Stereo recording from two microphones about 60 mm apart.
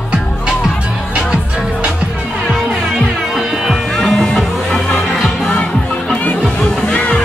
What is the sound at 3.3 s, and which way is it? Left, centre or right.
Music, centre.